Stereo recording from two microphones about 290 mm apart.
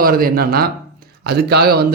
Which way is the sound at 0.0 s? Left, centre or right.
Right.